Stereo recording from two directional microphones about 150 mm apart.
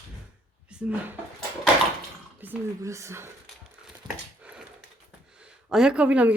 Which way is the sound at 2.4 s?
15° right (ahead or behind).